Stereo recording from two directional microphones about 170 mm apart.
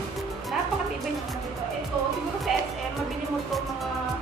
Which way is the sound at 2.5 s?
Centre (ahead or behind).